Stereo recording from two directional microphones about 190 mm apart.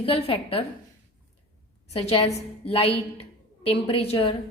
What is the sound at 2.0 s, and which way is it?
A woman's voice, 30° left (ahead or behind).